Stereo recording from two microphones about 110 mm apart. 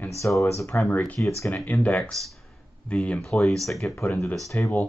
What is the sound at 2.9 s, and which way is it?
Speech, 10° left (ahead or behind).